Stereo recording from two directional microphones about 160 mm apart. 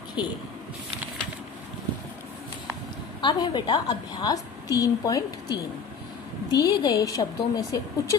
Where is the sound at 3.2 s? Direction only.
30° left (ahead or behind).